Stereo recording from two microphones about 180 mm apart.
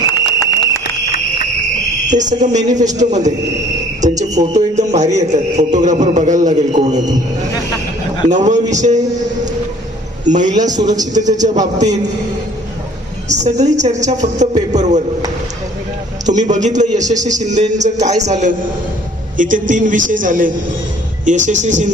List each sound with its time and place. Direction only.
0.3 s a sound: 20° left (ahead or behind)
2.0 s a man's voice: 45° right (ahead or behind)
4.0 s cricket: 40° right (ahead or behind)
4.5 s a man's voice: 40° right (ahead or behind)
8.3 s a man's voice: 40° right (ahead or behind)
10.2 s a man's voice: 45° right (ahead or behind)
13.2 s a man's voice: 40° right (ahead or behind)
14.7 s a sound: 40° right (ahead or behind)
16.2 s a man's voice: 40° right (ahead or behind)